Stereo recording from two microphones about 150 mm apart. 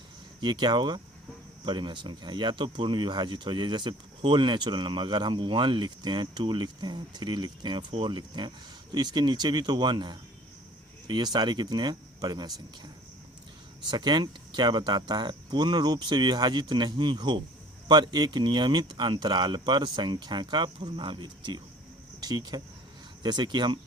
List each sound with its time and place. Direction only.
0.4 s speech: 30° right (ahead or behind)
13.8 s speech: 30° right (ahead or behind)